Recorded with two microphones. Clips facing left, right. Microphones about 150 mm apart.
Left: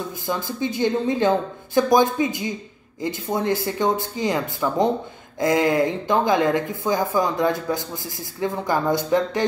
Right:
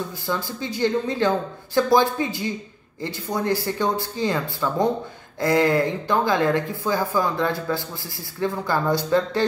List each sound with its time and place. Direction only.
0.3 s speech: 20° left (ahead or behind)